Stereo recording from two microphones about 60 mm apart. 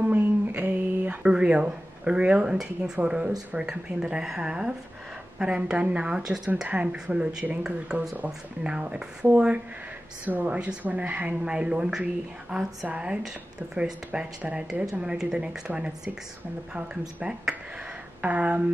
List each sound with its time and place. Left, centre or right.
0.0 s a sound: right
1.3 s speech: centre
6.7 s speech: right
14.4 s speech: centre
17.2 s speech: centre